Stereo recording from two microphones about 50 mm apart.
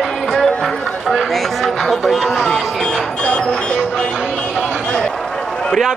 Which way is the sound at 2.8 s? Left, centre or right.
Centre.